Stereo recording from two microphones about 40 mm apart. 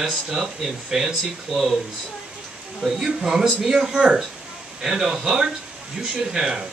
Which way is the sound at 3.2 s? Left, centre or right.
Centre.